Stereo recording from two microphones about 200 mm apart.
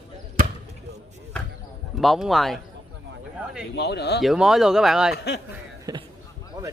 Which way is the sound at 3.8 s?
55° left (ahead or behind).